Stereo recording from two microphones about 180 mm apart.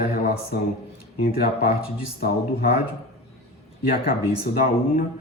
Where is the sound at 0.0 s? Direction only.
60° left (ahead or behind).